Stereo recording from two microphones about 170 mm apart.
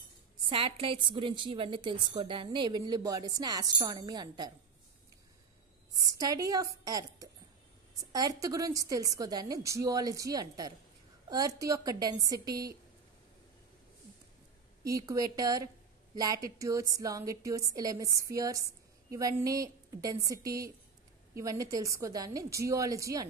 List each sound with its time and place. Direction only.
0.5 s a woman's voice: 30° right (ahead or behind)
5.9 s a woman's voice: 20° right (ahead or behind)
14.8 s a woman's voice: 20° right (ahead or behind)